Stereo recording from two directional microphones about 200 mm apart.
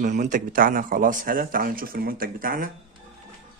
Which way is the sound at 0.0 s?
40° right (ahead or behind).